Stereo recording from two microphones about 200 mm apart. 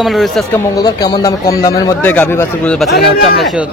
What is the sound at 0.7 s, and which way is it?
A man's voice, 20° left (ahead or behind).